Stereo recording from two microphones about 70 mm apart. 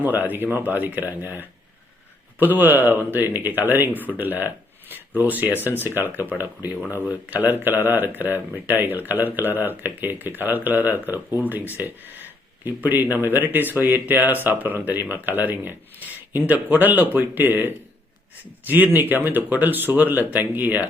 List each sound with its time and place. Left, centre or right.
0.0 s speech: right
5.5 s speech: left
5.7 s speech: right
12.6 s speech: right